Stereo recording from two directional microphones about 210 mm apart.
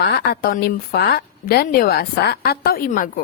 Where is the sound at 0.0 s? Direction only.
50° left (ahead or behind).